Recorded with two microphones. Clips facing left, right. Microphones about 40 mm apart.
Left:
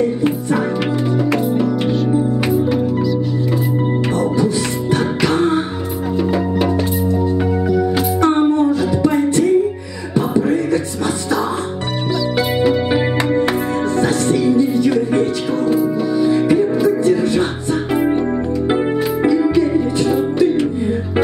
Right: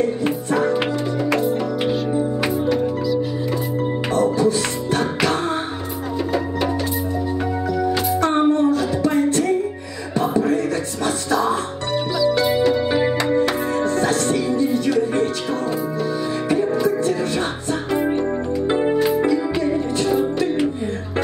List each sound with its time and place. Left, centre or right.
0.2 s music: centre
4.9 s music: centre
7.7 s music: centre
10.1 s a sound: centre
12.4 s music: centre
15.6 s music: centre